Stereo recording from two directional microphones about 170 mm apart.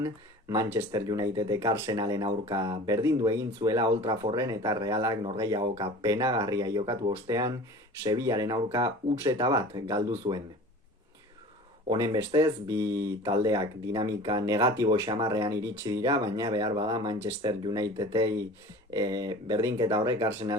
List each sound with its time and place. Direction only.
0.0 s speech: 20° right (ahead or behind)
10.3 s speech: 40° right (ahead or behind)
11.9 s speech: 20° right (ahead or behind)
15.5 s speech: 90° right
15.8 s speech: 20° right (ahead or behind)